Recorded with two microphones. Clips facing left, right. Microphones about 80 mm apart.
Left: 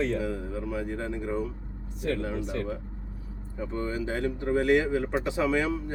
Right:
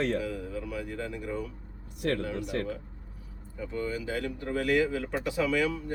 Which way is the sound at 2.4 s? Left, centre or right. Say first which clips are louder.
Even; right.